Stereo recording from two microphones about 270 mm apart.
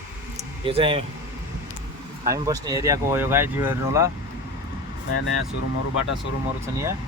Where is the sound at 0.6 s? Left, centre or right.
Centre.